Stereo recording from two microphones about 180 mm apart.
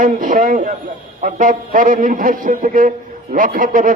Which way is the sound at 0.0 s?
45° right (ahead or behind).